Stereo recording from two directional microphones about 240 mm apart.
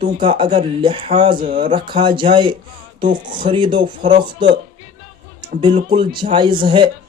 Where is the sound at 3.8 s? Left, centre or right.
Right.